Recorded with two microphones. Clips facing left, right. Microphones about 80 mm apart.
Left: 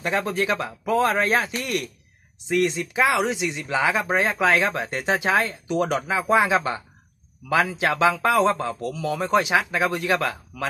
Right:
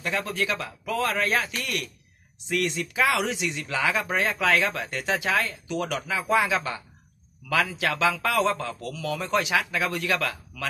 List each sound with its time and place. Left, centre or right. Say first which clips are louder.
0.0 s speech: left 4 dB; left